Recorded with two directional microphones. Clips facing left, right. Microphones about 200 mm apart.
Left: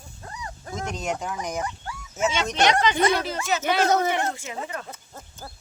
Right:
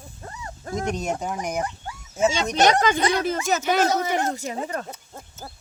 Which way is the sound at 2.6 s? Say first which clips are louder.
Right 1 dB; 45° right (ahead or behind).